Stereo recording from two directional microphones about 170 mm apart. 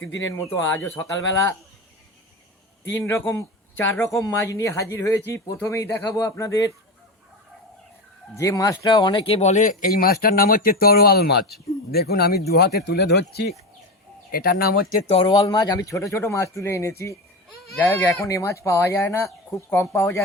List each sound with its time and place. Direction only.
0.3 s speech: 15° left (ahead or behind)
3.0 s speech: 15° left (ahead or behind)
8.4 s speech: 20° left (ahead or behind); by 13.5 s 75° left (ahead or behind)
14.3 s speech: 60° left (ahead or behind)
15.0 s speech: 30° left (ahead or behind); by 20.2 s 15° left (ahead or behind)